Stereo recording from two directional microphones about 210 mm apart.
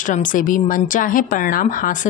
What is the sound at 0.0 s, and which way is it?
A woman's voice, 40° left (ahead or behind).